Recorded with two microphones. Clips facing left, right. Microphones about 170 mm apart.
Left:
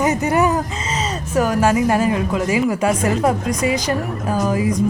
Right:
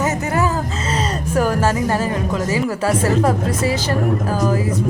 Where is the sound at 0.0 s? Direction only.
20° left (ahead or behind).